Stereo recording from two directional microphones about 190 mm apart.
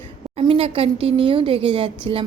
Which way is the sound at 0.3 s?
30° right (ahead or behind).